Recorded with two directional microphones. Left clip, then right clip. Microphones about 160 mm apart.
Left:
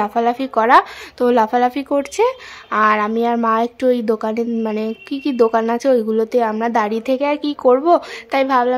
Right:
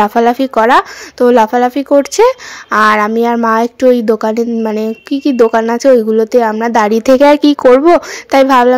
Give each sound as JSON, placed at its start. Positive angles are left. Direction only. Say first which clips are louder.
{"t": 0.0, "sound": "speech", "louder": "right 8 dB", "side_deg": -35}